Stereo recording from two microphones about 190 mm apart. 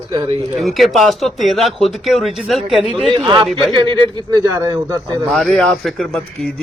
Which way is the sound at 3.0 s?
25° right (ahead or behind).